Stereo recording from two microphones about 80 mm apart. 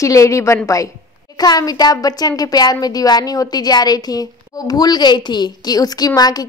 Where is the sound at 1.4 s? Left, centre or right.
Left.